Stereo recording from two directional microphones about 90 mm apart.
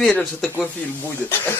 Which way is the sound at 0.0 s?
5° left (ahead or behind).